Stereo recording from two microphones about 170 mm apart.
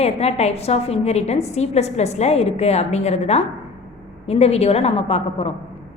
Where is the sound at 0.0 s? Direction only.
40° left (ahead or behind).